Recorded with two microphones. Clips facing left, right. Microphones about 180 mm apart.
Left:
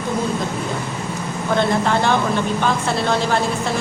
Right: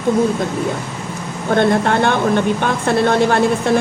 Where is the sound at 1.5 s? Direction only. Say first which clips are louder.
Right 4 dB; 55° right (ahead or behind).